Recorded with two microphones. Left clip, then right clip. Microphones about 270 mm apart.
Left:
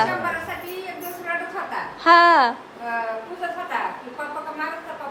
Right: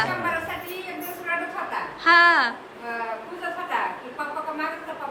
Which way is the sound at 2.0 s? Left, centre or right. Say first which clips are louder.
Left 3 dB; centre.